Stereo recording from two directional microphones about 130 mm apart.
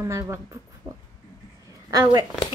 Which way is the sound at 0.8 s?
30° right (ahead or behind).